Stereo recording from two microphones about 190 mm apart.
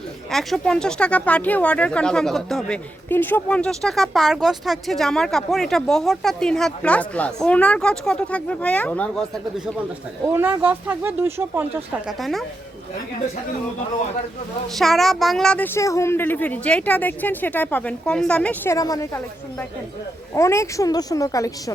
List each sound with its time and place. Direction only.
0.3 s speech: centre (ahead or behind)
10.2 s speech: 10° right (ahead or behind)
12.0 s speech: centre (ahead or behind)
14.8 s speech: centre (ahead or behind); by 21.5 s 20° left (ahead or behind)